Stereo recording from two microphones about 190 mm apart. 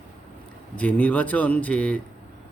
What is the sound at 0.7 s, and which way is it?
Speech, 5° left (ahead or behind).